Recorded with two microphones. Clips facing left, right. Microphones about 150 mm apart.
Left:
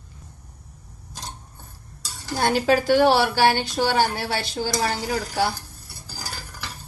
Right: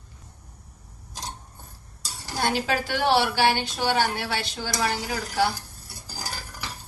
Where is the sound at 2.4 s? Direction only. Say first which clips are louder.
Left 5 dB; 40° left (ahead or behind).